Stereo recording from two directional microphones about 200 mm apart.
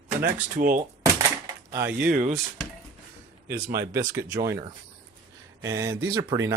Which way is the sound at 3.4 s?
15° right (ahead or behind).